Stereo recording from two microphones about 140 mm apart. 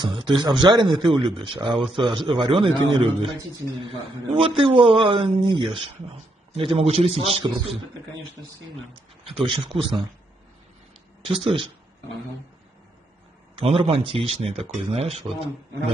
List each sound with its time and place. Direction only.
0.0 s a man's voice: 35° right (ahead or behind)
8.9 s a man's voice: 40° right (ahead or behind)
11.2 s a man's voice: 40° right (ahead or behind)
13.6 s speech: 45° right (ahead or behind)